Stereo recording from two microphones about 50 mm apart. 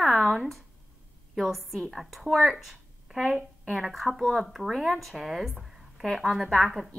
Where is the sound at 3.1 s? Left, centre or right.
Centre.